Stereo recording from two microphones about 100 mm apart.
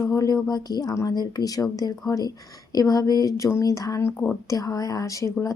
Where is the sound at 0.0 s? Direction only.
35° left (ahead or behind).